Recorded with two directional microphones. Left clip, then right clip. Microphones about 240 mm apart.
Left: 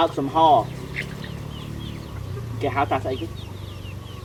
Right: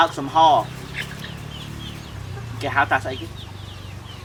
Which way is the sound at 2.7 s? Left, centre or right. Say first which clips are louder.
Right 3 dB; right.